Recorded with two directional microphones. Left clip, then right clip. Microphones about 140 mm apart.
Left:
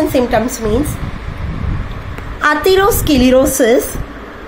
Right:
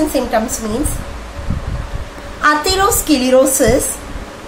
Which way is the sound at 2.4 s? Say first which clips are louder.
Left 2 dB; 35° left (ahead or behind).